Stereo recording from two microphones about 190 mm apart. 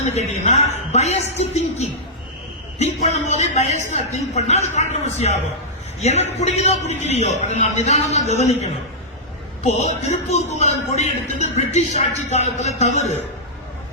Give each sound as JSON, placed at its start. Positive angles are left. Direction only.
{"t": 0.0, "sound": "a woman's voice", "side_deg": 35}
{"t": 6.0, "sound": "a man's voice", "side_deg": 35}